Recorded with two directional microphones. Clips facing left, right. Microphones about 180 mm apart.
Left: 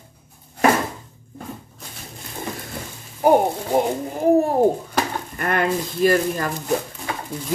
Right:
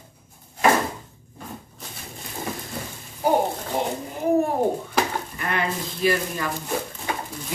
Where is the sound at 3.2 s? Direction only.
50° left (ahead or behind).